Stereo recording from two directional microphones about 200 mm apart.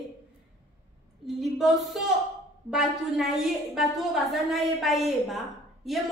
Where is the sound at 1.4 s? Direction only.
Centre (ahead or behind).